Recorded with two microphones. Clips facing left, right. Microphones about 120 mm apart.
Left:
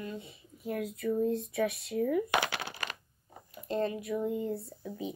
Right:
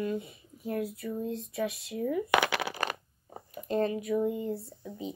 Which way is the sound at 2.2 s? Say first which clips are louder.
Right 5 dB; 70° right (ahead or behind).